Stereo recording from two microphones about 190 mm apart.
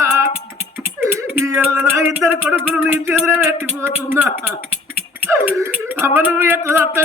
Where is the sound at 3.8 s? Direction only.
10° right (ahead or behind).